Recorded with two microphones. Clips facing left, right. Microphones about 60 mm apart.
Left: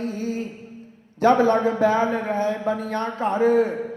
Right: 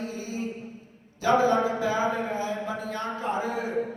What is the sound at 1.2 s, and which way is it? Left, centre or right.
A man's voice, left.